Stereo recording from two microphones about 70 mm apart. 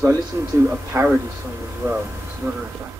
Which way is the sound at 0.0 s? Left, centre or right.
Right.